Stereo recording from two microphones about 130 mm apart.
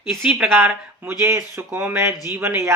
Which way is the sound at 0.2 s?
10° right (ahead or behind).